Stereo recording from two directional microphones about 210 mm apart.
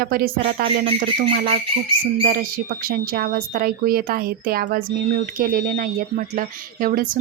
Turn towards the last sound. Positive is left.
turn(degrees=-40)  # may be behind; listen again after turning